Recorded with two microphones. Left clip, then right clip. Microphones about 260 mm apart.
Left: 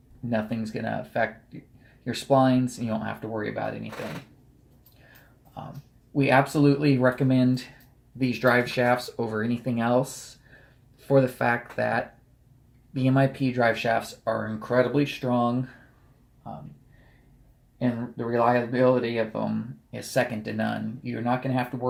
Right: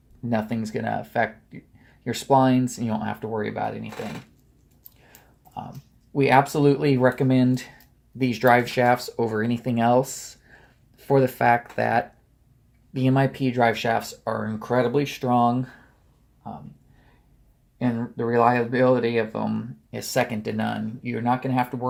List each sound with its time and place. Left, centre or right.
0.3 s speech: right
6.1 s speech: right
11.0 s speech: right
18.3 s speech: right